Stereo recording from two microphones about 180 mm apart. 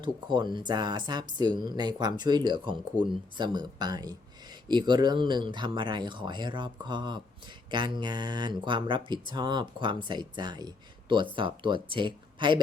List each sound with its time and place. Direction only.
0.0 s speech: 25° right (ahead or behind)